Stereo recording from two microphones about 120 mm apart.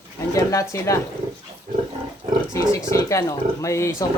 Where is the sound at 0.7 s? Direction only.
25° left (ahead or behind).